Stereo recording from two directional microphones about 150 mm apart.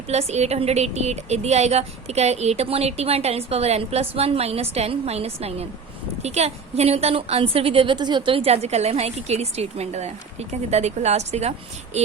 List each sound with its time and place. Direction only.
0.1 s a woman's voice: 45° right (ahead or behind)